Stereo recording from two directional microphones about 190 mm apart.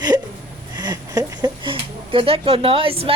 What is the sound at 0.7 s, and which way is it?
Speech, 20° right (ahead or behind).